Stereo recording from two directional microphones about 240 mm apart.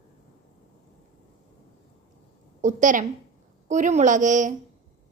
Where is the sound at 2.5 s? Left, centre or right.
Right.